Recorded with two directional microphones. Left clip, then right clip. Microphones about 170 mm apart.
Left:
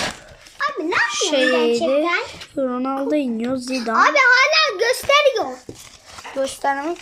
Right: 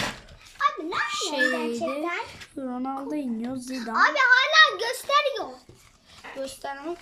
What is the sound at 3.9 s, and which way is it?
A child's voice, 10° left (ahead or behind).